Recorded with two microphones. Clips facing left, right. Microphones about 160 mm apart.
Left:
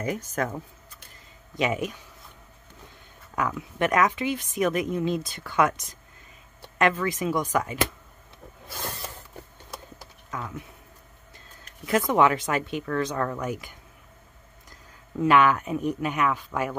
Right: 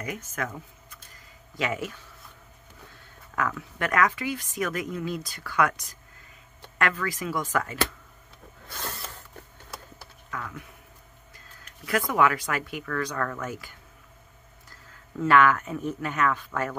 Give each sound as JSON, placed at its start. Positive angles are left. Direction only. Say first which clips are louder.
{"t": 0.0, "sound": "speech", "louder": "left 5 dB", "side_deg": 35}
{"t": 1.6, "sound": "a woman's voice", "louder": "left 4 dB", "side_deg": 20}
{"t": 3.3, "sound": "a woman's voice", "louder": "left 3 dB", "side_deg": 20}
{"t": 8.6, "sound": "a sound", "louder": "left 2 dB", "side_deg": 15}
{"t": 10.3, "sound": "a woman's voice", "louder": "left 2 dB", "side_deg": 20}